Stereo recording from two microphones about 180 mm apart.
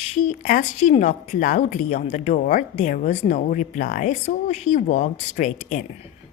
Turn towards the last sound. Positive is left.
turn(degrees=45)  # may be behind; listen again after turning